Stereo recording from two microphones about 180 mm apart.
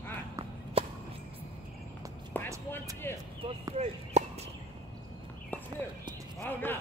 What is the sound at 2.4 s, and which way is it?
Speech, 10° left (ahead or behind).